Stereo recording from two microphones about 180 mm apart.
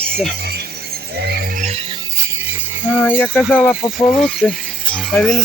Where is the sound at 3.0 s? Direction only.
10° left (ahead or behind).